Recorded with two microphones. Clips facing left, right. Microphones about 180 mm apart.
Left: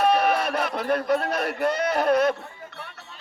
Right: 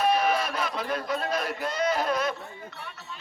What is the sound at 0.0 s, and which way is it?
Speech, 65° left (ahead or behind).